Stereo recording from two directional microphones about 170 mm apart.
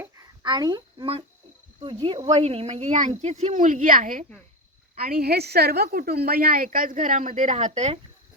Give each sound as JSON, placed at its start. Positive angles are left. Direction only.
{"t": 0.0, "sound": "a sound", "side_deg": -20}
{"t": 1.8, "sound": "speech", "side_deg": -30}
{"t": 4.9, "sound": "a woman's voice", "side_deg": -60}